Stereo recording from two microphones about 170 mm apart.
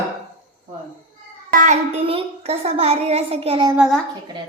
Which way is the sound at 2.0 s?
35° right (ahead or behind).